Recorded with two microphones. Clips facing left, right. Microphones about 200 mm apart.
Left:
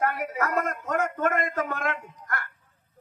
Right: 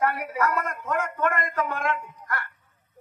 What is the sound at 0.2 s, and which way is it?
Speech, 45° left (ahead or behind).